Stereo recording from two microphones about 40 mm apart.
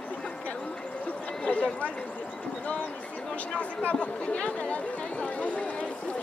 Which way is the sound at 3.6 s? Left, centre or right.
Left.